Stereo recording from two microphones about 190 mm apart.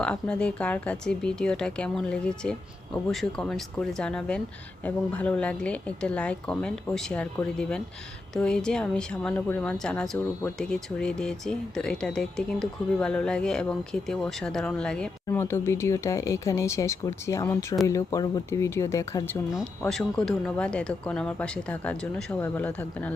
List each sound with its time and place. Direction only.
0.0 s speech: 5° left (ahead or behind)